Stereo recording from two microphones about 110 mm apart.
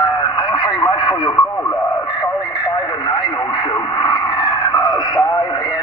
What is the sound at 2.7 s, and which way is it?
Radio, 40° left (ahead or behind).